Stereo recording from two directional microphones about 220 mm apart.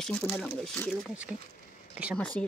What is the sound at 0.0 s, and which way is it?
Speech, 5° left (ahead or behind).